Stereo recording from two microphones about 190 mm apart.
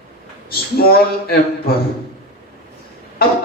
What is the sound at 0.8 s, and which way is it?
Speech, 50° left (ahead or behind).